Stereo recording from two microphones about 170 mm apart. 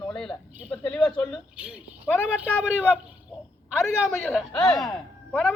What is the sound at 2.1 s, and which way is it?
Speech, 10° left (ahead or behind).